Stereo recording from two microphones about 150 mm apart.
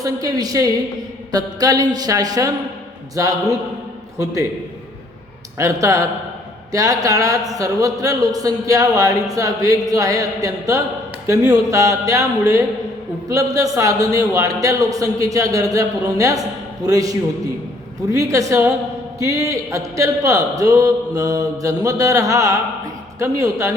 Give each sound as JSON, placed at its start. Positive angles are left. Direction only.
{"t": 0.0, "sound": "a man's voice", "side_deg": -25}
{"t": 5.5, "sound": "a man's voice", "side_deg": -20}